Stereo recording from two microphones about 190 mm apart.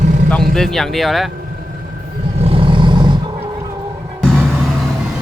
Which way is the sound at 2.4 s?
30° right (ahead or behind).